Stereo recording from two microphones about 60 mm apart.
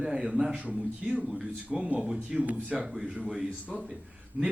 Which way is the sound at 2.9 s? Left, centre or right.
Centre.